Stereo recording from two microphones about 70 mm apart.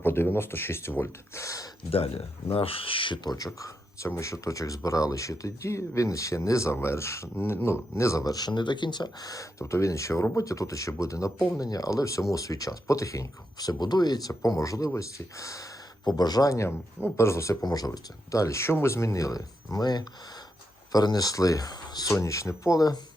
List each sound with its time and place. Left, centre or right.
0.0 s speech: left
3.2 s speech: left
8.2 s speech: left
11.5 s speech: left
16.0 s speech: left
16.6 s speech: left
22.1 s speech: left